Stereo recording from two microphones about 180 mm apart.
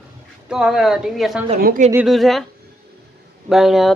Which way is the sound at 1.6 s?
55° right (ahead or behind).